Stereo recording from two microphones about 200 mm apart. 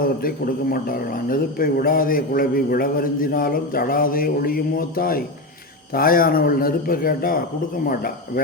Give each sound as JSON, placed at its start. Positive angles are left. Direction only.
{"t": 0.0, "sound": "a man's voice", "side_deg": 45}